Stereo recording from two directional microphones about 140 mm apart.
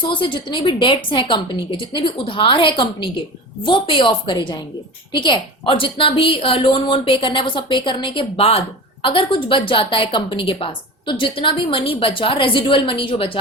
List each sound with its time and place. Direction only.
0.1 s a woman's voice: 35° left (ahead or behind)